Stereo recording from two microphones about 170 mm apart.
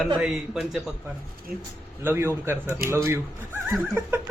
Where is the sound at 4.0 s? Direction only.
15° right (ahead or behind).